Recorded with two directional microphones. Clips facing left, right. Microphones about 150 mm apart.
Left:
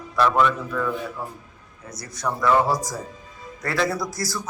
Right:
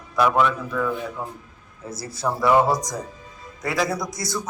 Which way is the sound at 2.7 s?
5° left (ahead or behind).